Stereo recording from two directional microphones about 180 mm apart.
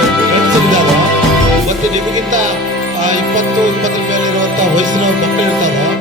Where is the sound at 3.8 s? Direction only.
45° right (ahead or behind).